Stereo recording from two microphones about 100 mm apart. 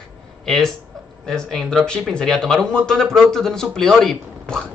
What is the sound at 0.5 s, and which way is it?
Speech, 5° left (ahead or behind).